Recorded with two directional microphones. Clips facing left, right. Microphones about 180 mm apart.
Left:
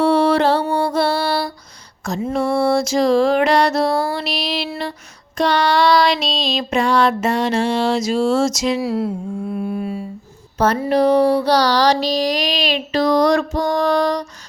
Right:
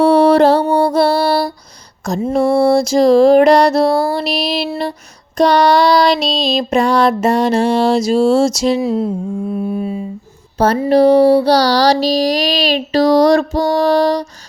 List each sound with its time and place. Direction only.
0.0 s music: 40° right (ahead or behind)
8.8 s mantra: 20° right (ahead or behind)
9.7 s humming: 25° right (ahead or behind)
10.8 s music: 30° right (ahead or behind)